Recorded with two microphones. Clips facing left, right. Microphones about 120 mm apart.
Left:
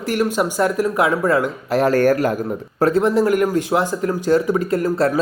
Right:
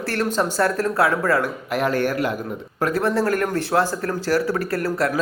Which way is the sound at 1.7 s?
40° left (ahead or behind).